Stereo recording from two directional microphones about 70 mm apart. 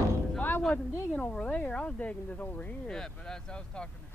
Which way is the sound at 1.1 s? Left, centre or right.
Centre.